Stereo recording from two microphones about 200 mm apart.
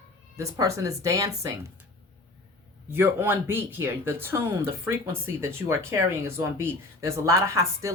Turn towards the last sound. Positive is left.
turn(degrees=-15)  # may be behind; listen again after turning